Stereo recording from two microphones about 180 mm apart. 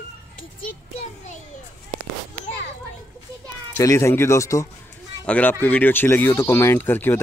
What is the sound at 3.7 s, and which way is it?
Speech, 15° left (ahead or behind).